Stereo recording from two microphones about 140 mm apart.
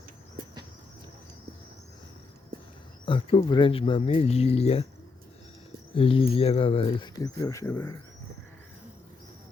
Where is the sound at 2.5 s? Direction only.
90° right.